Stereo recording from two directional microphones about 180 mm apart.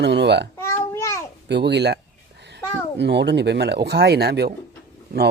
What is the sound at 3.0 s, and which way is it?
Speech, 70° right (ahead or behind).